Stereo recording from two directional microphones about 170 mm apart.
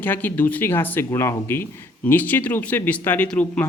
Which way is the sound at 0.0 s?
10° left (ahead or behind).